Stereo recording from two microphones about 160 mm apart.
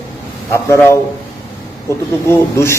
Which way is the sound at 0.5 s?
15° left (ahead or behind).